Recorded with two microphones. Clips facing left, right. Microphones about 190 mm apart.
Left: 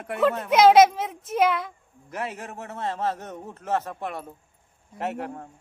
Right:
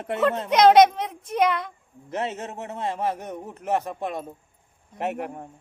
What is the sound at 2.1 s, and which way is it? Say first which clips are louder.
A man's voice: right 4 dB; 25° right (ahead or behind).